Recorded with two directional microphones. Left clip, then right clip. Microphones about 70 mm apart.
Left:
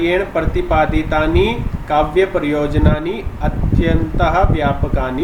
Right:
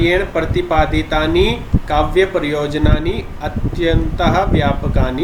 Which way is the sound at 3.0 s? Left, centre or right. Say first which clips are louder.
Even; centre.